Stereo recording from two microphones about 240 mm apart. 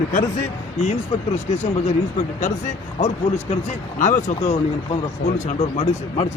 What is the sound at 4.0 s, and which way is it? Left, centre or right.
Speech, left.